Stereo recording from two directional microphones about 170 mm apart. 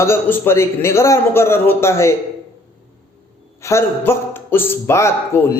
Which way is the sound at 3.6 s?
15° left (ahead or behind).